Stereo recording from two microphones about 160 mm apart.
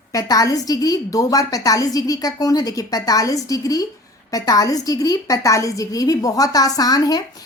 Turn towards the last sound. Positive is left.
turn(degrees=25)  # may be behind; listen again after turning